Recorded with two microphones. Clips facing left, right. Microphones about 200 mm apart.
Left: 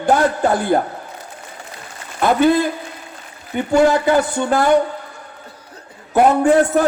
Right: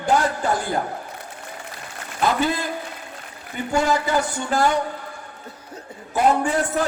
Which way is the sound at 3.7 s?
60° left (ahead or behind).